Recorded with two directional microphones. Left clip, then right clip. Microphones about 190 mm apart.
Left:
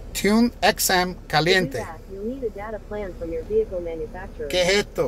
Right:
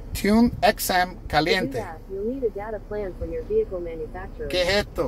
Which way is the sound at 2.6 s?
35° left (ahead or behind).